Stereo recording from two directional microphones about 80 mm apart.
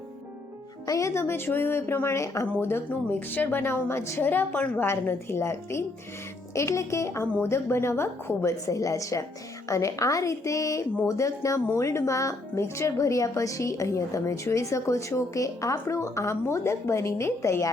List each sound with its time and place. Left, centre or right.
0.9 s a woman's voice: left
4.3 s a woman's voice: left
4.9 s speech: left